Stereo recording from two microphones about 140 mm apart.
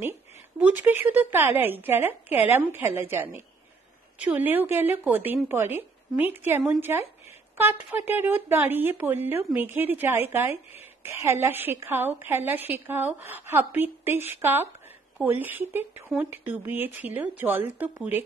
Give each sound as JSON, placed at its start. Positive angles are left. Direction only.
{"t": 0.6, "sound": "speech", "side_deg": -10}